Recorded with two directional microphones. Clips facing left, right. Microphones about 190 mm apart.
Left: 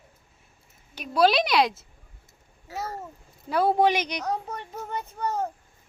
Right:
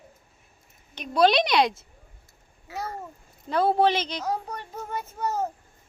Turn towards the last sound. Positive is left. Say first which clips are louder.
# even
turn(degrees=-5)  # may be behind; listen again after turning